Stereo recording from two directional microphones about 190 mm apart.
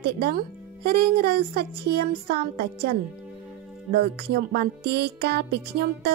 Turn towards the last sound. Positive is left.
turn(degrees=-60)  # may be behind; listen again after turning